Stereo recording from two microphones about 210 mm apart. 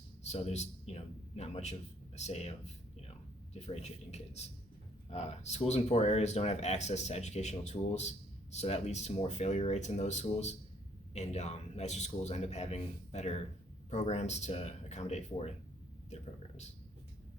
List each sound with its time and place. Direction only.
0.2 s a man's voice: 30° left (ahead or behind)